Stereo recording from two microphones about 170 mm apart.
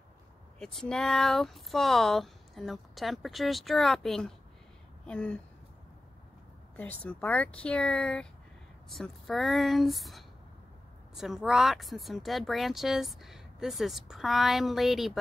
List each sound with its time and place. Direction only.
0.6 s speech: 5° left (ahead or behind)
6.8 s speech: 10° left (ahead or behind)